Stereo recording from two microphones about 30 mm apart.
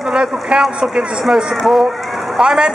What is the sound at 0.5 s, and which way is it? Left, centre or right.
Speech, right.